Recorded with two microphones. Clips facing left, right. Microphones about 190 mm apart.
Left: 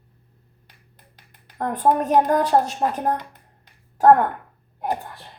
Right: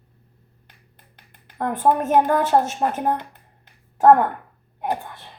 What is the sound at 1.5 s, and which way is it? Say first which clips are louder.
Speech: even; 5° right (ahead or behind).